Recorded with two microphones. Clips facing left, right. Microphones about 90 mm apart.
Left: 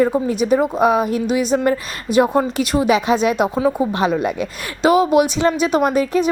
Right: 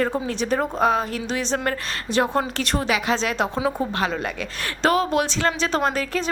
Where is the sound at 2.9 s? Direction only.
20° left (ahead or behind).